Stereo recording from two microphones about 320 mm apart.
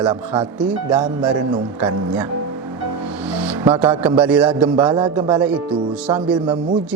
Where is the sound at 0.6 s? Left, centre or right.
Centre.